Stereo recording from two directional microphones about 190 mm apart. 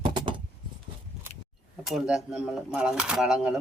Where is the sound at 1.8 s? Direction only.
Centre (ahead or behind).